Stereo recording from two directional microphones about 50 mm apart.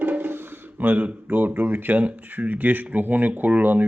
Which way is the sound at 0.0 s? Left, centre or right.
Right.